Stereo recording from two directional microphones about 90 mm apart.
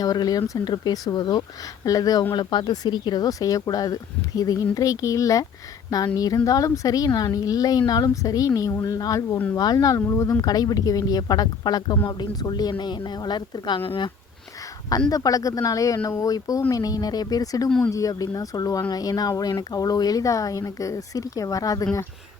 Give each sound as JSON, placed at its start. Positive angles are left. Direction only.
{"t": 0.0, "sound": "speech", "side_deg": 45}
{"t": 2.3, "sound": "a woman's voice", "side_deg": 60}
{"t": 13.8, "sound": "speech", "side_deg": 80}
{"t": 15.1, "sound": "speech", "side_deg": 40}